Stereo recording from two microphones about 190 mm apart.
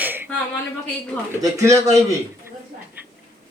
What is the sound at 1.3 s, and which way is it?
Speech, 15° right (ahead or behind).